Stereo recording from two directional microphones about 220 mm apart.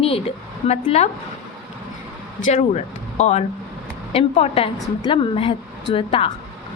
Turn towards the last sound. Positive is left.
turn(degrees=25)  # may be behind; listen again after turning